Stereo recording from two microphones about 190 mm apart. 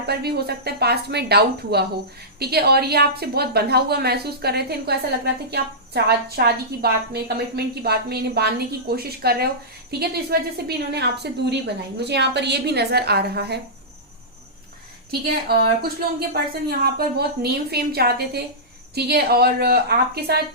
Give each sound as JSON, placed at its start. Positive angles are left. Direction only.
{"t": 0.0, "sound": "a woman's voice", "side_deg": -55}
{"t": 15.4, "sound": "a woman's voice", "side_deg": -55}